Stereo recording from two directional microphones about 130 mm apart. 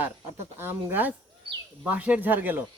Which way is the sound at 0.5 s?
15° right (ahead or behind).